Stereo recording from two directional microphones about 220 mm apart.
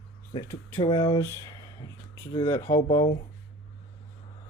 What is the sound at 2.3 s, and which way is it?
Speech, 15° left (ahead or behind).